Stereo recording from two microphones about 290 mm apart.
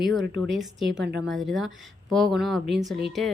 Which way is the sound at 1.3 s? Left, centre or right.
Centre.